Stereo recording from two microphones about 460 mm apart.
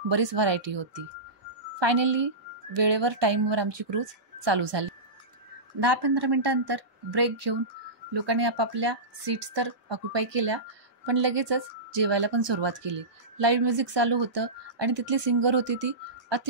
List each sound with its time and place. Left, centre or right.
0.1 s speech: right